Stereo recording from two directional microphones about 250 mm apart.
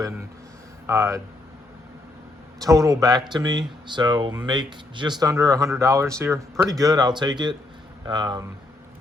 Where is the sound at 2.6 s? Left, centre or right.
Centre.